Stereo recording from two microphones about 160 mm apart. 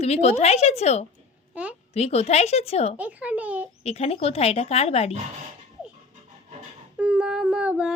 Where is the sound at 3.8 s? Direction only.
40° left (ahead or behind).